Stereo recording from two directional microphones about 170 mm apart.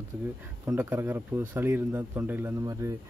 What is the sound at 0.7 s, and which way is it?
Speech, 10° right (ahead or behind).